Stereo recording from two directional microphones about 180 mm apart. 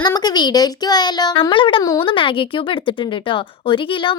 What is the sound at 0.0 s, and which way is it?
A child's voice, 20° left (ahead or behind).